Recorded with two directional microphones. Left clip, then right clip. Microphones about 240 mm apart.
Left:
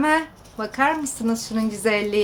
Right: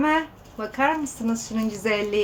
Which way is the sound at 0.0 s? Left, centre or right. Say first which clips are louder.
Left 2 dB; left.